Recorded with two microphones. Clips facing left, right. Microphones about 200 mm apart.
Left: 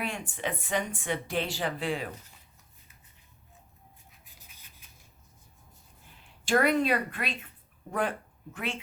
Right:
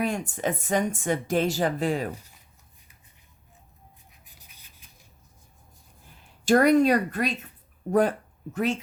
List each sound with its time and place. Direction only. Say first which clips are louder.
0.0 s speech: right 7 dB; 45° right (ahead or behind)
6.4 s a woman's voice: right 7 dB; 40° right (ahead or behind)